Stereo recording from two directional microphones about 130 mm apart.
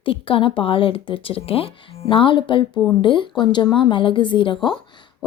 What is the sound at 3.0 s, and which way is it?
Speech, 40° left (ahead or behind).